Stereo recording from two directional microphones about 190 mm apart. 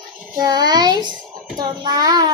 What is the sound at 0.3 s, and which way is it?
A woman's voice, 20° right (ahead or behind).